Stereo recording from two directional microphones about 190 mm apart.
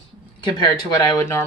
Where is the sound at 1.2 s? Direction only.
15° left (ahead or behind).